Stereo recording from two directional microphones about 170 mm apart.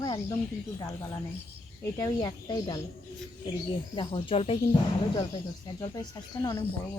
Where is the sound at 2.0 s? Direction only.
20° left (ahead or behind).